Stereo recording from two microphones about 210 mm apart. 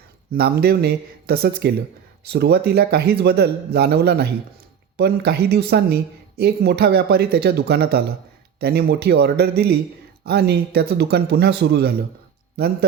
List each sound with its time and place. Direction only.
0.3 s a woman's voice: 50° right (ahead or behind)